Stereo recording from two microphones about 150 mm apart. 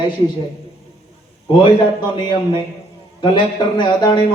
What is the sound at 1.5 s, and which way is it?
Speech, 30° left (ahead or behind).